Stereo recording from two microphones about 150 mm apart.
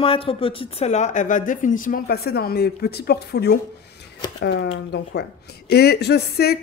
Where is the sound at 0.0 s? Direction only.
40° left (ahead or behind).